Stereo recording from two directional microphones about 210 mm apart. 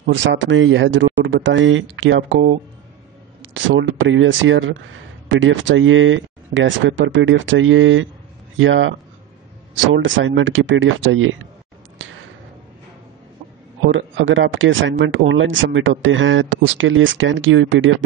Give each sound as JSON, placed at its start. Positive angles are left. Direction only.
{"t": 0.0, "sound": "speech", "side_deg": -60}
{"t": 3.5, "sound": "speech", "side_deg": -65}
{"t": 12.0, "sound": "a sound", "side_deg": -65}
{"t": 13.9, "sound": "speech", "side_deg": -65}